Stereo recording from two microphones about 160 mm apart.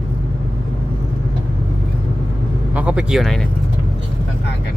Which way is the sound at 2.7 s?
10° right (ahead or behind).